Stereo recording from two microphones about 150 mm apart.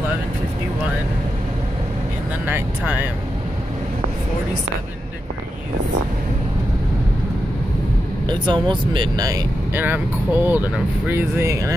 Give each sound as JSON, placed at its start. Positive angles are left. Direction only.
{"t": 2.4, "sound": "speech", "side_deg": -15}
{"t": 8.3, "sound": "speech", "side_deg": -30}
{"t": 9.8, "sound": "speech", "side_deg": -10}